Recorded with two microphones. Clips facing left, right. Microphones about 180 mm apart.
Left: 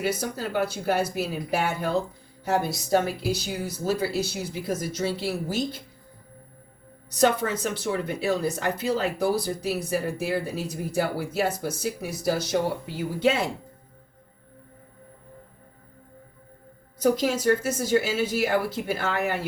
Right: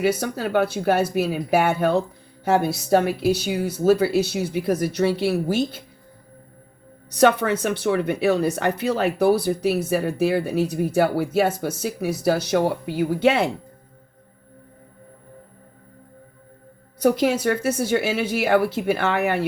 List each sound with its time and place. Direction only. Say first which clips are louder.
0.2 s speech: right 5 dB; 65° right (ahead or behind)
7.2 s speech: right 5 dB; 65° right (ahead or behind)
17.0 s speech: right 4 dB; 65° right (ahead or behind)